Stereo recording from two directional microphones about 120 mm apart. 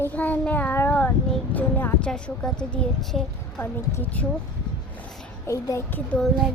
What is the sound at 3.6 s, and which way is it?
Speech, 15° left (ahead or behind).